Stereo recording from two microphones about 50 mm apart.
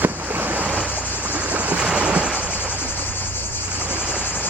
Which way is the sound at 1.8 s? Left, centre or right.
Centre.